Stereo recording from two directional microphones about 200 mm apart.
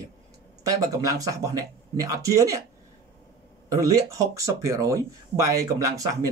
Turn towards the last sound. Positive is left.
turn(degrees=-15)  # may be behind; listen again after turning